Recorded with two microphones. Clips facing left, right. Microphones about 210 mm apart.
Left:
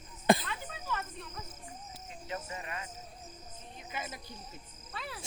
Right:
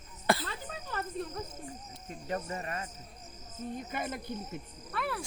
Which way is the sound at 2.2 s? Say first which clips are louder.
Right 5 dB; 45° right (ahead or behind).